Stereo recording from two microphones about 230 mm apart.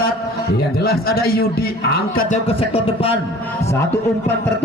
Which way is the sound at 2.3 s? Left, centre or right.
Left.